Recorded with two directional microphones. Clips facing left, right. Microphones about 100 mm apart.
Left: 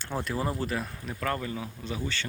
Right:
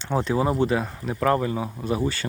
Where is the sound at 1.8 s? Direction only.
45° right (ahead or behind).